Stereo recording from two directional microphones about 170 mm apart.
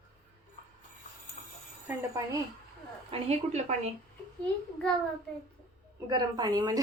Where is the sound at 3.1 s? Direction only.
40° right (ahead or behind).